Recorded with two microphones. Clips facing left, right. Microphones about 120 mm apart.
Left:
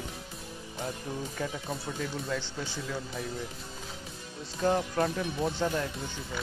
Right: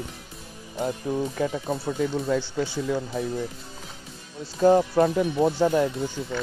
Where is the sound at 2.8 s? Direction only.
25° right (ahead or behind).